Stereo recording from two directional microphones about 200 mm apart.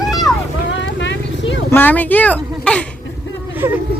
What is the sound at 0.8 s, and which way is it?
Vehicle, 65° left (ahead or behind).